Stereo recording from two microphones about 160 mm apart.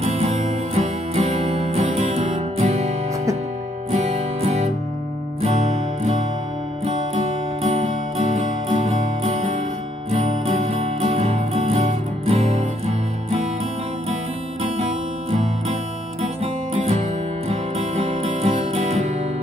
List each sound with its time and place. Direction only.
0.0 s music: 40° right (ahead or behind)
3.9 s music: 45° right (ahead or behind)
8.6 s music: 45° right (ahead or behind)
17.5 s music: 40° right (ahead or behind)